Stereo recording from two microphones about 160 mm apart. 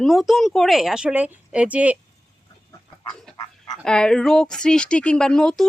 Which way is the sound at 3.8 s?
5° left (ahead or behind).